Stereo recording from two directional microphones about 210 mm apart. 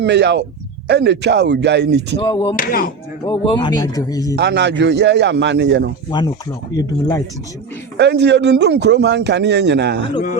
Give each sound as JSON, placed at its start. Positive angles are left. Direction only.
{"t": 0.0, "sound": "a man's voice", "side_deg": -55}
{"t": 2.1, "sound": "speech", "side_deg": 25}
{"t": 2.6, "sound": "speech", "side_deg": 40}
{"t": 3.2, "sound": "speech", "side_deg": 20}
{"t": 4.4, "sound": "a man's voice", "side_deg": -55}
{"t": 6.1, "sound": "speech", "side_deg": 20}
{"t": 7.9, "sound": "speech", "side_deg": -55}